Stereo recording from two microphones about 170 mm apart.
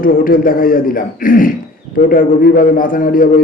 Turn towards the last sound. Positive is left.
turn(degrees=55)  # may be behind; listen again after turning